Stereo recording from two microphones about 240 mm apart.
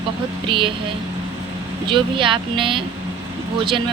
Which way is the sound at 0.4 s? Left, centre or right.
Right.